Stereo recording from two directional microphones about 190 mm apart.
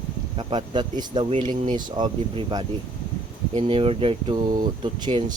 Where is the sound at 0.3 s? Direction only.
25° right (ahead or behind).